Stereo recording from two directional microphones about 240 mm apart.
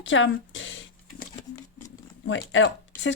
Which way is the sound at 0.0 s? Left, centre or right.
Left.